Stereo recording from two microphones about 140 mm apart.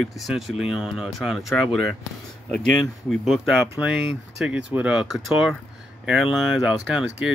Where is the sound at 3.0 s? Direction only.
Centre (ahead or behind).